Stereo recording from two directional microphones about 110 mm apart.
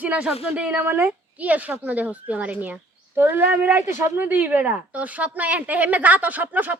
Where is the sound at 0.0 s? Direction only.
15° right (ahead or behind).